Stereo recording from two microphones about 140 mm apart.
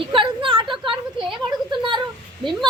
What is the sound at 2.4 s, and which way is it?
Speech, centre (ahead or behind).